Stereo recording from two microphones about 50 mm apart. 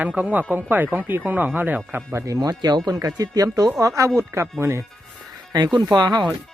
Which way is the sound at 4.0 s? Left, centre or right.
Right.